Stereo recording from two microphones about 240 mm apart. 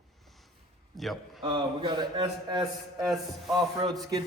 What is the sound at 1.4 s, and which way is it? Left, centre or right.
A man's voice, centre.